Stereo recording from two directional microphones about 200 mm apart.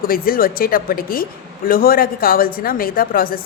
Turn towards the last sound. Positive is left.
turn(degrees=45)  # may be behind; listen again after turning